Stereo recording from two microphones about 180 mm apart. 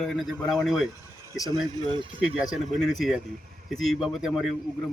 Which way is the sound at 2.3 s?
5° right (ahead or behind).